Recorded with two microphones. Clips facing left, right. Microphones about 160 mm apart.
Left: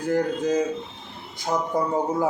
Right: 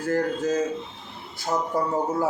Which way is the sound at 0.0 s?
15° left (ahead or behind).